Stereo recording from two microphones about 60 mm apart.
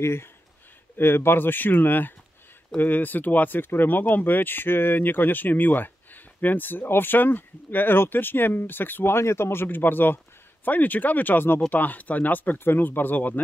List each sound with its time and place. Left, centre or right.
0.0 s speech: left